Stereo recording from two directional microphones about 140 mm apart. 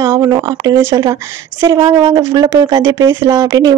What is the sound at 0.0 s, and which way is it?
Speech, 20° right (ahead or behind).